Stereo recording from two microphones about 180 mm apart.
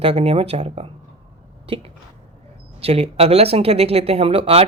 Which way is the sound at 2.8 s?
35° right (ahead or behind).